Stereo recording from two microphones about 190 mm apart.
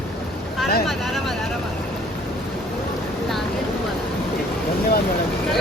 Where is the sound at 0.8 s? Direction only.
Centre (ahead or behind).